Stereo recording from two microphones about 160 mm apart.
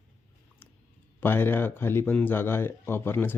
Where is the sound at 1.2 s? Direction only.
15° left (ahead or behind).